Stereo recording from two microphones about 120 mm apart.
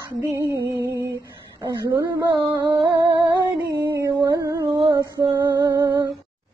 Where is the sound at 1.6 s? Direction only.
30° right (ahead or behind).